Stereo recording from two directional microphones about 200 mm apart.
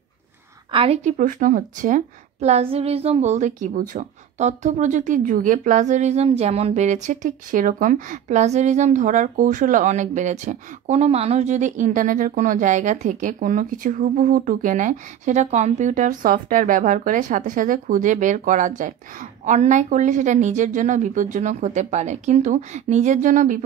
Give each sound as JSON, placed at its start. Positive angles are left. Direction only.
{"t": 0.7, "sound": "speech", "side_deg": -30}